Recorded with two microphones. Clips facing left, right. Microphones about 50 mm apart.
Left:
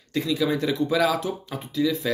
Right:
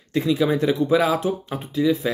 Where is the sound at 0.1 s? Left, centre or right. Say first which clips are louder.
Right 4 dB; right.